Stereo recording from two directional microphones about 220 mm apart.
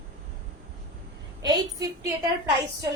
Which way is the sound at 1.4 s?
15° right (ahead or behind).